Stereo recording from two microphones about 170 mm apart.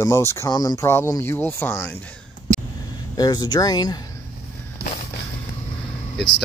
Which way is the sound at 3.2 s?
25° left (ahead or behind).